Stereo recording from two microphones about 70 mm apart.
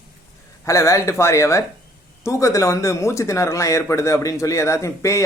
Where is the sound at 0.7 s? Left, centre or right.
Left.